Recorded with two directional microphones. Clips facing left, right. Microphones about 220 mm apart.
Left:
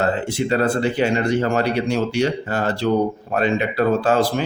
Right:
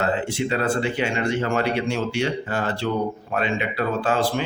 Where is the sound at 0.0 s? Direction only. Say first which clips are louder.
Left 3 dB; 40° left (ahead or behind).